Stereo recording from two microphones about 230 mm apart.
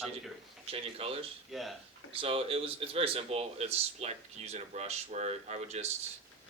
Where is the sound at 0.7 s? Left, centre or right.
Right.